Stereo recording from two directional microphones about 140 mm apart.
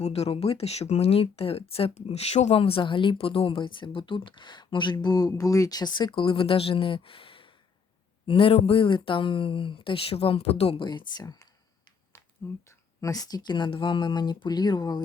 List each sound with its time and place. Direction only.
0.0 s speech: 45° left (ahead or behind)
10.8 s speech: 30° left (ahead or behind)
12.4 s speech: 15° left (ahead or behind)